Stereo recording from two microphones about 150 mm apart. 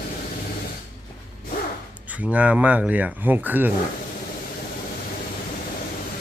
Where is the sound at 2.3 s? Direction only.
10° right (ahead or behind).